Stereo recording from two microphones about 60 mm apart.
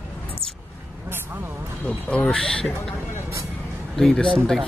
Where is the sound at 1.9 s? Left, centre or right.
Left.